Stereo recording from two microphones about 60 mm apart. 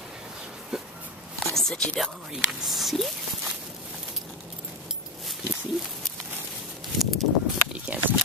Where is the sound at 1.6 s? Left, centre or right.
Centre.